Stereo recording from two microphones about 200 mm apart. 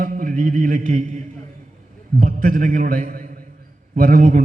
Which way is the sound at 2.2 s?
40° right (ahead or behind).